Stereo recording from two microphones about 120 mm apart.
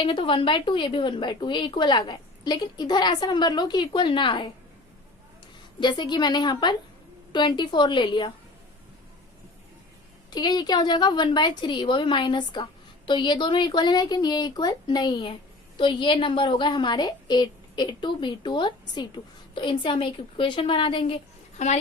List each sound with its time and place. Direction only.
0.0 s a woman's voice: 45° left (ahead or behind)
5.8 s a woman's voice: 40° left (ahead or behind)
10.3 s a woman's voice: 35° left (ahead or behind)
21.6 s a child's voice: 70° left (ahead or behind)